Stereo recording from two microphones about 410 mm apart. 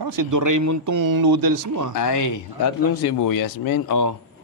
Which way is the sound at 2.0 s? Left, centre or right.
Left.